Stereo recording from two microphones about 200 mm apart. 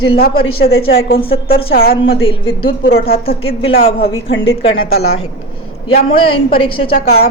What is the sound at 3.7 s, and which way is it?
Speech, 45° left (ahead or behind).